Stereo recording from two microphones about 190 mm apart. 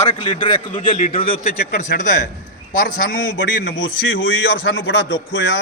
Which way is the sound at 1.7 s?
40° left (ahead or behind).